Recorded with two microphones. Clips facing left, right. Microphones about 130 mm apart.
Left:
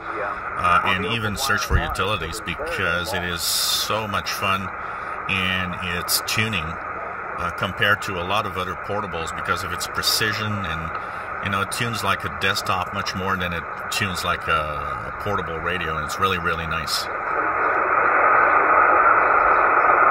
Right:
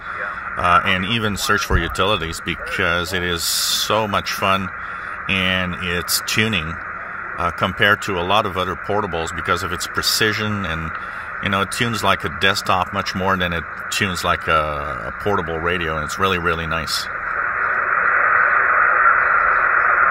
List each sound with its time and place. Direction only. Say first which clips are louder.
0.6 s speech: right 3 dB; 90° right
5.3 s speech: right 7 dB; 90° right
7.4 s speech: right 5 dB; 70° right (ahead or behind); by 17.0 s 90° right
17.3 s radio: left 2 dB; 35° left (ahead or behind)